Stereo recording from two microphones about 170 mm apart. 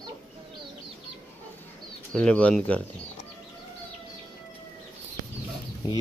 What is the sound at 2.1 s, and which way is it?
Speech, 5° left (ahead or behind).